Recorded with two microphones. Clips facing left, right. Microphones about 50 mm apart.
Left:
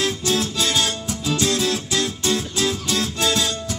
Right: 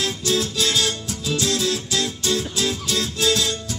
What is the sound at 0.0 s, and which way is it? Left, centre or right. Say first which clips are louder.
Music: left 1 dB; left.